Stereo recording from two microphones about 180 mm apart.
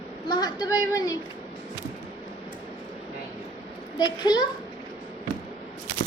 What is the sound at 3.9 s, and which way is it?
Speech, 25° left (ahead or behind).